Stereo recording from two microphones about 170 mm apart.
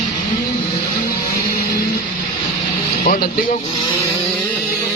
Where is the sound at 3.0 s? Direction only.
55° left (ahead or behind).